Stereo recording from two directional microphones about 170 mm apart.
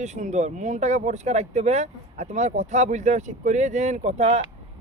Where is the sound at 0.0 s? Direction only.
45° right (ahead or behind).